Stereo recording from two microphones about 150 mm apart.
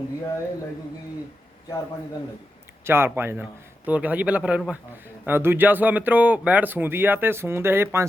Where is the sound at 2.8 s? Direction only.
15° right (ahead or behind).